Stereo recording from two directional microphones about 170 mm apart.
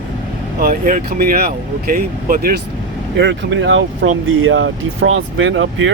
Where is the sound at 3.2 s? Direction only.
90° right.